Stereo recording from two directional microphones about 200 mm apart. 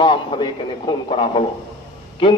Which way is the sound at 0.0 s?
25° left (ahead or behind).